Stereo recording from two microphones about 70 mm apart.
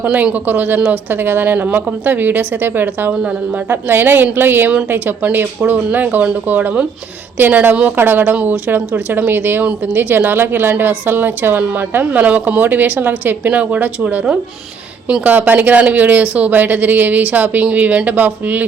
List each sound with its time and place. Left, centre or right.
0.0 s a woman's voice: centre
3.1 s speech: centre
3.7 s a woman's voice: right